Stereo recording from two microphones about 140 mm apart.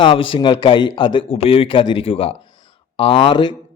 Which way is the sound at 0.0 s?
35° left (ahead or behind).